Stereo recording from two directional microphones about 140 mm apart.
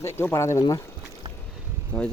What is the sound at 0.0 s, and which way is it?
Speech, 15° left (ahead or behind).